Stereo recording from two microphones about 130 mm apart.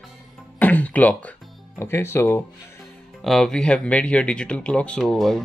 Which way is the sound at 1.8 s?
20° left (ahead or behind).